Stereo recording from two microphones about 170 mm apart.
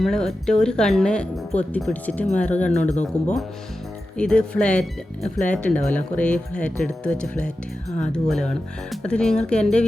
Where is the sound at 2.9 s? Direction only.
45° left (ahead or behind).